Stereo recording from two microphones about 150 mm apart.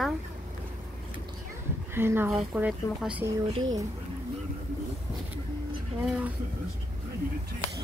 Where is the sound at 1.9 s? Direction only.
15° right (ahead or behind).